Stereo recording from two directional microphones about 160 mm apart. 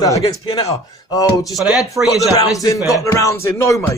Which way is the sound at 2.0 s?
20° right (ahead or behind).